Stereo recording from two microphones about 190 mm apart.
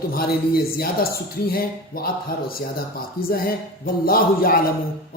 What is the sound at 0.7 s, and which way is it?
Speech, 55° left (ahead or behind).